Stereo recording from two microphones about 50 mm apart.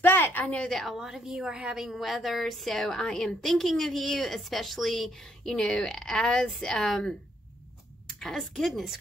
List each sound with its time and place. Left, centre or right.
0.0 s a sound: left
0.7 s a woman's voice: centre
0.9 s a woman's voice: centre
1.9 s a woman's voice: centre